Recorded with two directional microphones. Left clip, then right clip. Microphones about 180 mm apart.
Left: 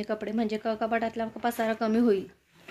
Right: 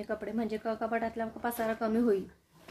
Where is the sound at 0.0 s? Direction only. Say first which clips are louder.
Left 4 dB; 50° left (ahead or behind).